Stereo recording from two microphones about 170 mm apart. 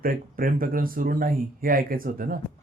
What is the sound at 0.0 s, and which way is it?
A man's voice, 55° right (ahead or behind).